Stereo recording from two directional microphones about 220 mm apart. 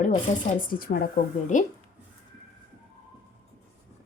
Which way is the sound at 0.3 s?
35° left (ahead or behind).